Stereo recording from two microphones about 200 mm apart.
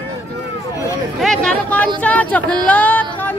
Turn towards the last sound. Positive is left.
turn(degrees=10)  # may be behind; listen again after turning